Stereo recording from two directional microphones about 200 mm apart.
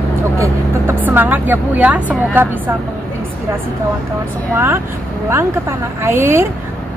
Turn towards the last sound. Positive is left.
turn(degrees=-10)  # may be behind; listen again after turning